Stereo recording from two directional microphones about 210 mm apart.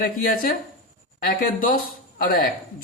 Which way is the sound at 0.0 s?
45° left (ahead or behind).